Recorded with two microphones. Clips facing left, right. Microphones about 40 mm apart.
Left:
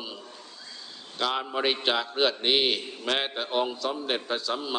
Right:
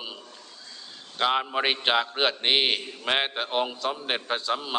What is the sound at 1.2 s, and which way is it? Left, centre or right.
A man's voice, right.